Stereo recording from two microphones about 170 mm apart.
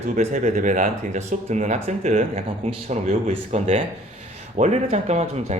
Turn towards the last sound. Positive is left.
turn(degrees=-40)  # may be behind; listen again after turning